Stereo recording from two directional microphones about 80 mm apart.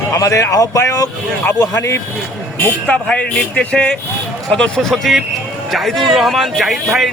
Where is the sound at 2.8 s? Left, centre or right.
Centre.